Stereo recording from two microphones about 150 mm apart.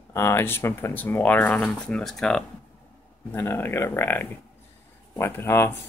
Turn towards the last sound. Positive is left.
turn(degrees=15)  # may be behind; listen again after turning